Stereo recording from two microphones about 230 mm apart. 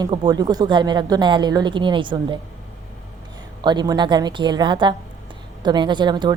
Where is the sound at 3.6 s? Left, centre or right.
Centre.